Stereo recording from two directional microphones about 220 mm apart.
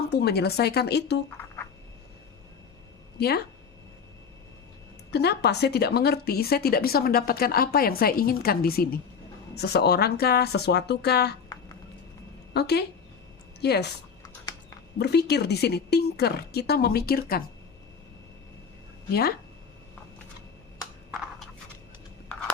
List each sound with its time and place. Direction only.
0.1 s a woman's voice: 45° left (ahead or behind)
3.2 s speech: 45° left (ahead or behind)
5.1 s a woman's voice: 50° left (ahead or behind)
12.5 s a woman's voice: 50° left (ahead or behind)
14.9 s a woman's voice: 50° left (ahead or behind)